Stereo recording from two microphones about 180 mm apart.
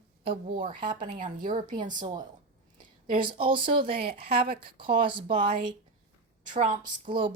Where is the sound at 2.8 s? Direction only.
50° right (ahead or behind).